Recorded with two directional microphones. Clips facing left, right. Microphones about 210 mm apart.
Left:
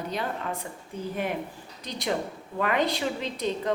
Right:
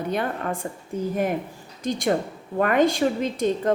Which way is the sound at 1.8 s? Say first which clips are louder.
Right 6 dB; 50° right (ahead or behind).